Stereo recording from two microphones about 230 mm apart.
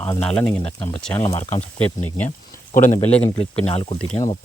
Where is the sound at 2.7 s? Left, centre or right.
Left.